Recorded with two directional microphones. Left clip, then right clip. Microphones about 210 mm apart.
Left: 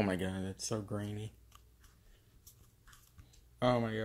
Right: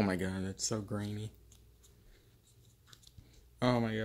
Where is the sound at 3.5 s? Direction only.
15° right (ahead or behind).